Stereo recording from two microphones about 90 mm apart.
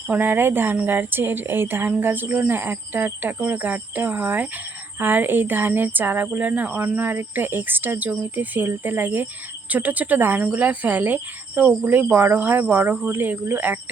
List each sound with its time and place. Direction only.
0.1 s a woman's voice: 20° right (ahead or behind)